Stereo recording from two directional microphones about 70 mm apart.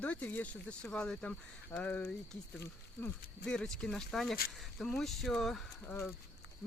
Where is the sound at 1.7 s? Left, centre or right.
Left.